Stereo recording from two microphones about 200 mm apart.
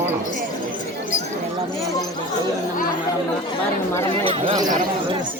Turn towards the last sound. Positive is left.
turn(degrees=-25)  # may be behind; listen again after turning